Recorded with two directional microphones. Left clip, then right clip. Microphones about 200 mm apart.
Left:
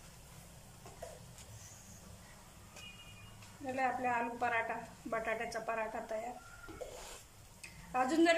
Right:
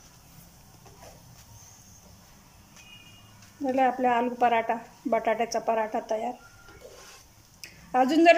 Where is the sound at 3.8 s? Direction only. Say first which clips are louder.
Right 11 dB; 40° right (ahead or behind).